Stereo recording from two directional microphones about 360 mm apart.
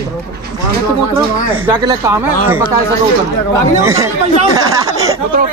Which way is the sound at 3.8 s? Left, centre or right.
Centre.